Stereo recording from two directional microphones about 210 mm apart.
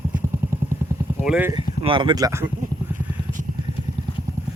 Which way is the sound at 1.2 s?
5° right (ahead or behind).